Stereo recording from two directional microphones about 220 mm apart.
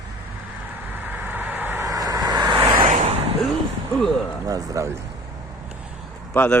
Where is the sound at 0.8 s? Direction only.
10° right (ahead or behind).